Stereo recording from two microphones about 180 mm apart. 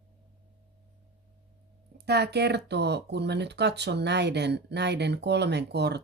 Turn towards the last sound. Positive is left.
turn(degrees=-70)  # may be behind; listen again after turning